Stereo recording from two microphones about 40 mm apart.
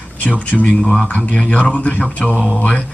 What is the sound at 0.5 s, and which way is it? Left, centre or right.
Speech, centre.